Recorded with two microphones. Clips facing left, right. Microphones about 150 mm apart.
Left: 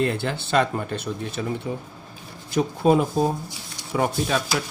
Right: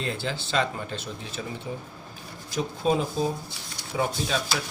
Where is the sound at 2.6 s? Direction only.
55° left (ahead or behind).